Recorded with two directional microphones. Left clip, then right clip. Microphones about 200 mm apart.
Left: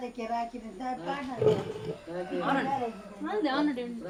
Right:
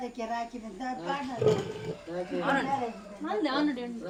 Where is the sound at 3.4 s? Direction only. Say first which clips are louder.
Left 1 dB; centre (ahead or behind).